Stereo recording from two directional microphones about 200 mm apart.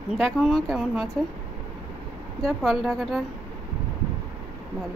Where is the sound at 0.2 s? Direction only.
Centre (ahead or behind).